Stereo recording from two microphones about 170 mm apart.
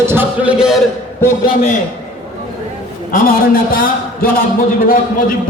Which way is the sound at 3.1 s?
55° left (ahead or behind).